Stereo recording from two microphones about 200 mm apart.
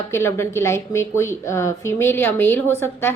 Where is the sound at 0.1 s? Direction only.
15° left (ahead or behind).